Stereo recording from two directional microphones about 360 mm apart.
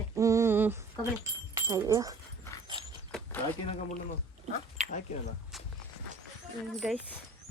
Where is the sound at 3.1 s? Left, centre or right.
Centre.